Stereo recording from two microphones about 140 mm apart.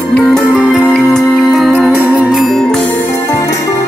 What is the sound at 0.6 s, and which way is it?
Music, 10° left (ahead or behind).